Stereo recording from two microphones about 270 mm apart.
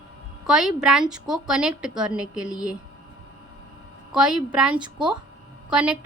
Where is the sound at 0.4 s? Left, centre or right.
Centre.